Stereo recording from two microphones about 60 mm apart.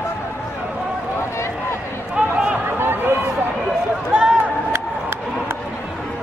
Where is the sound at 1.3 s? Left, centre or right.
Left.